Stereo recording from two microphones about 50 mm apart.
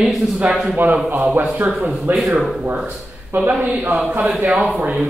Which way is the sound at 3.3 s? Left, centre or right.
Right.